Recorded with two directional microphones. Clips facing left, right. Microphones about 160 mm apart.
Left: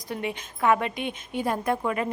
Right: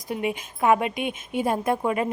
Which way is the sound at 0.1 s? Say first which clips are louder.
Right 4 dB; 20° right (ahead or behind).